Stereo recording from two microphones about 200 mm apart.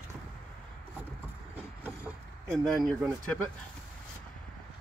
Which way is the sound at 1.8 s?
5° right (ahead or behind).